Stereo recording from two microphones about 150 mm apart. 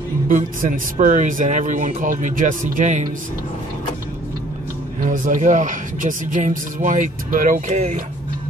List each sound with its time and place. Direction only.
0.3 s speech: 55° right (ahead or behind)
5.0 s speech: 60° right (ahead or behind)